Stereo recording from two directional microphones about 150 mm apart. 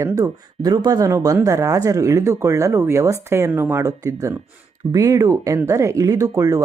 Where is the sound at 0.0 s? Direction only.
20° right (ahead or behind).